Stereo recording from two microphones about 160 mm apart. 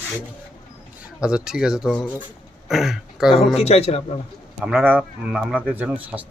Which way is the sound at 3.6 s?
40° left (ahead or behind).